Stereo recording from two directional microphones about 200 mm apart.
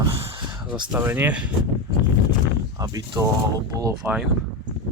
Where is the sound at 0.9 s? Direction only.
10° right (ahead or behind).